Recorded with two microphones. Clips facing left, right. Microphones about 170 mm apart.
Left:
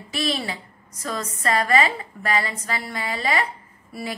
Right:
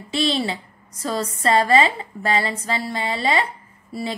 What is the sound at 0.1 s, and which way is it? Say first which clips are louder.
A woman's voice: right 4 dB; 25° right (ahead or behind).